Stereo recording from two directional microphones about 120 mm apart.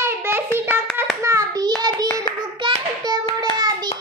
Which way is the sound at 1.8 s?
35° right (ahead or behind).